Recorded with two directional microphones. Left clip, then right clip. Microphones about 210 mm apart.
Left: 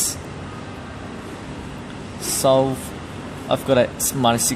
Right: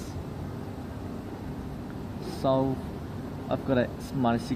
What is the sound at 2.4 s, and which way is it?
Speech, 50° left (ahead or behind).